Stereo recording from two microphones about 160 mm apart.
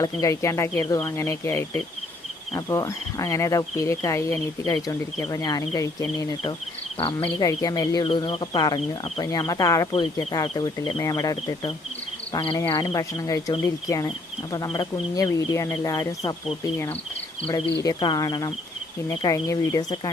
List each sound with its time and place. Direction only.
0.0 s speech: 20° left (ahead or behind)
7.3 s speech: 25° left (ahead or behind)
12.5 s speech: 20° left (ahead or behind)
17.8 s speech: 25° left (ahead or behind)